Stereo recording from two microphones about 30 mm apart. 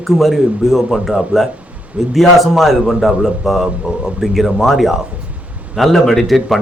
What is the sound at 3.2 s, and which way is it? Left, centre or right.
A man's voice, centre.